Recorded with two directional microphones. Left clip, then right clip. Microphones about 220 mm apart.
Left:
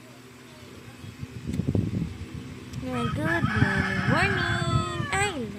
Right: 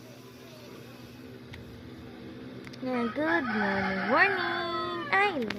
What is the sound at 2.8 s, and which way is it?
Speech, 25° left (ahead or behind).